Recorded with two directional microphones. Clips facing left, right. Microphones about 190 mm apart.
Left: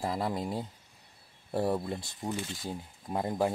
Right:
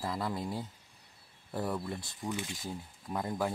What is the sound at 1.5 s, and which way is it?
Speech, 30° left (ahead or behind).